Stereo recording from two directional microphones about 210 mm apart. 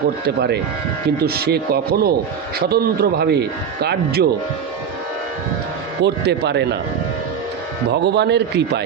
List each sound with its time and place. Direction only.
0.3 s a man's voice: 50° right (ahead or behind)
6.0 s speech: 55° right (ahead or behind)
7.9 s a man's voice: 55° right (ahead or behind)